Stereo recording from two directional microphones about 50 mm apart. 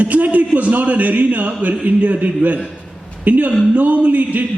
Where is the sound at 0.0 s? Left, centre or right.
Right.